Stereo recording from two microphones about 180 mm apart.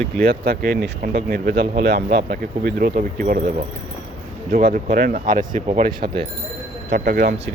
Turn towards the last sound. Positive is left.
turn(degrees=-55)  # may be behind; listen again after turning